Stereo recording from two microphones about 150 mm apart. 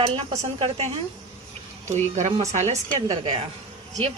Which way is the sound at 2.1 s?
50° right (ahead or behind).